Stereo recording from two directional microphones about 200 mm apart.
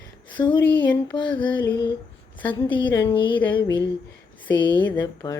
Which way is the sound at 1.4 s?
10° left (ahead or behind).